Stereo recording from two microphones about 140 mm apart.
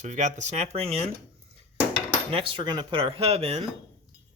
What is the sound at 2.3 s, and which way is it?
Speech, 40° right (ahead or behind).